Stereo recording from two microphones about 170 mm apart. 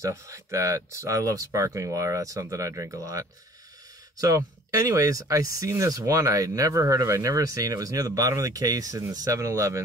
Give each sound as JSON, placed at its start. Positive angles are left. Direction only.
{"t": 0.0, "sound": "speech", "side_deg": -15}